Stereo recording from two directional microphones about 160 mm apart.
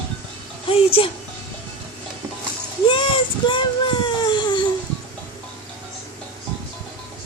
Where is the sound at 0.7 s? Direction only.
35° left (ahead or behind).